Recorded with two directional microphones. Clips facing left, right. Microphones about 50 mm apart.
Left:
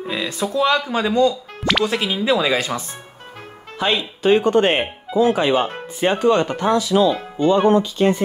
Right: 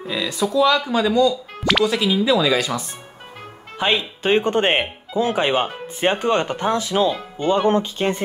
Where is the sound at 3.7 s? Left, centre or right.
Right.